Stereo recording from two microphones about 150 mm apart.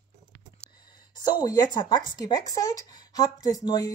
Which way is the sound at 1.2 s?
25° left (ahead or behind).